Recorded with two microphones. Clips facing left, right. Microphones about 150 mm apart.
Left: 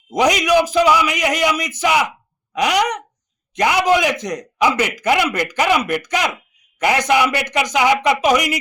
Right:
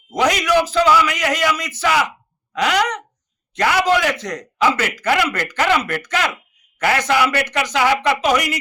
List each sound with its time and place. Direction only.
0.1 s a man's voice: 15° left (ahead or behind)